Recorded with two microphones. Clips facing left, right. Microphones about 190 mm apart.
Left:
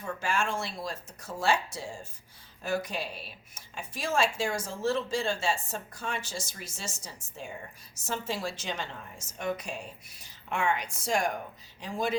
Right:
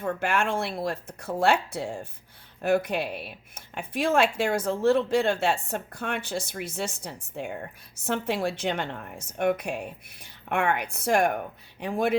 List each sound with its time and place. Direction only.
0.0 s speech: 60° right (ahead or behind)